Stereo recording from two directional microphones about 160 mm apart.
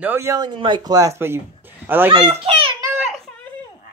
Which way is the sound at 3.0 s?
5° left (ahead or behind).